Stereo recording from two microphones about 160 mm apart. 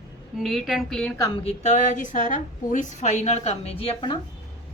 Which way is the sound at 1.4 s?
45° left (ahead or behind).